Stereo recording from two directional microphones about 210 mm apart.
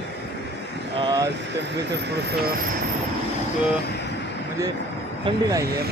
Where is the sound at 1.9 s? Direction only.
55° right (ahead or behind).